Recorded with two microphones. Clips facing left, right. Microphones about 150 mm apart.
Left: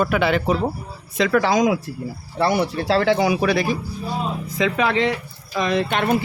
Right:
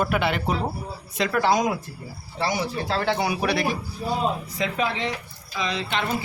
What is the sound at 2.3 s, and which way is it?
Speech, 65° left (ahead or behind).